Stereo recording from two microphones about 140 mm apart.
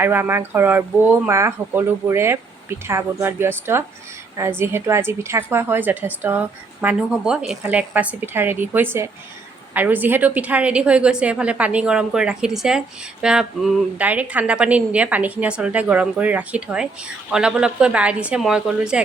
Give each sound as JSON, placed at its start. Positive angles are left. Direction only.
{"t": 0.0, "sound": "a woman's voice", "side_deg": -15}